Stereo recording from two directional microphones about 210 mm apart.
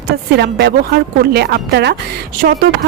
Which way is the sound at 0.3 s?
50° right (ahead or behind).